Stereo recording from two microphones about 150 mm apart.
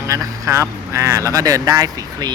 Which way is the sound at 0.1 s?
20° right (ahead or behind).